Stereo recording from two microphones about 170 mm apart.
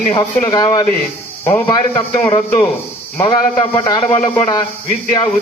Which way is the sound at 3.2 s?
25° left (ahead or behind).